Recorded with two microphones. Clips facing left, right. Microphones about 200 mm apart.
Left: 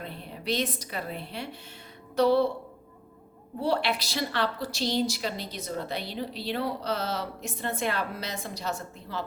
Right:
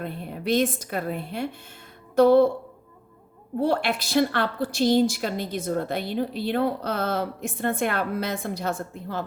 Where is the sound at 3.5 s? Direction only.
50° right (ahead or behind).